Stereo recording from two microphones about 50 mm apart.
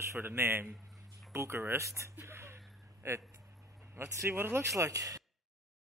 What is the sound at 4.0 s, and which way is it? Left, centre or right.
Speech, right.